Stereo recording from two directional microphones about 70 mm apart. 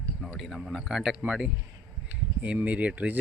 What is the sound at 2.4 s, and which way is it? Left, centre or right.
Speech, centre.